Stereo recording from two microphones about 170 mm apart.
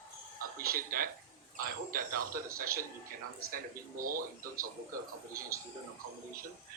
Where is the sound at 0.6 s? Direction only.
60° right (ahead or behind).